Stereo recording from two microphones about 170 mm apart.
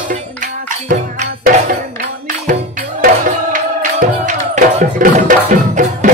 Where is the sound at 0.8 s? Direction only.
50° right (ahead or behind).